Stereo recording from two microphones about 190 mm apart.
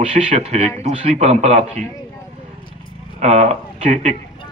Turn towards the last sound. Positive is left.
turn(degrees=-35)  # may be behind; listen again after turning